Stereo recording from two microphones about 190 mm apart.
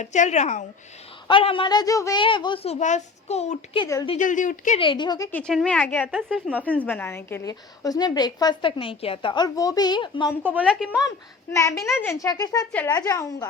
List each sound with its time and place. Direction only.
0.0 s a child's voice: 40° left (ahead or behind)
1.3 s a woman's voice: 25° left (ahead or behind)
2.7 s a child's voice: 40° left (ahead or behind)
4.8 s a woman's voice: 25° left (ahead or behind)
5.3 s a woman's voice: 5° left (ahead or behind)
6.2 s a woman's voice: centre (ahead or behind)
6.6 s a woman's voice: 10° left (ahead or behind); by 10.3 s 25° left (ahead or behind)
10.4 s a woman's voice: 5° right (ahead or behind)
11.5 s speech: 15° left (ahead or behind)